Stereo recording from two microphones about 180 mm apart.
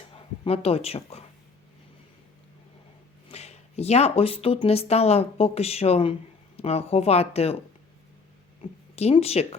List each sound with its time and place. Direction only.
0.4 s speech: 35° left (ahead or behind)
3.2 s speech: 35° left (ahead or behind)
9.0 s speech: 35° left (ahead or behind)